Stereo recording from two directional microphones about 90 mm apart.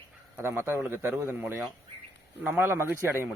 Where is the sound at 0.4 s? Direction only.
30° right (ahead or behind).